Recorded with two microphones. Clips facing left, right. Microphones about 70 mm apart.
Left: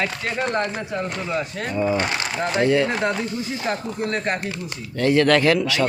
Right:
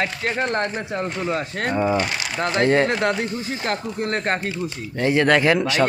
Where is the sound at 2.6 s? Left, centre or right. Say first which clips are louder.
Right 1 dB; right.